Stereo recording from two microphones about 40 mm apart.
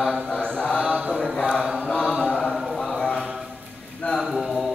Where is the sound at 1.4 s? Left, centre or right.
Left.